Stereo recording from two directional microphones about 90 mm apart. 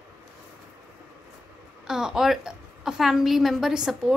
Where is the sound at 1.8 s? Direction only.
5° right (ahead or behind).